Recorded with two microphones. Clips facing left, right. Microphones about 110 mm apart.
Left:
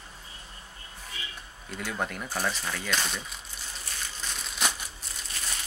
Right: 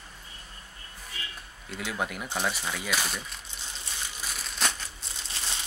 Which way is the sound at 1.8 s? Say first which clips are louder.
Even; 5° right (ahead or behind).